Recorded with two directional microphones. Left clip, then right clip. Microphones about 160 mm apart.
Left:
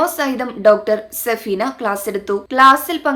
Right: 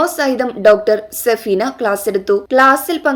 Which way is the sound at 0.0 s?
10° right (ahead or behind).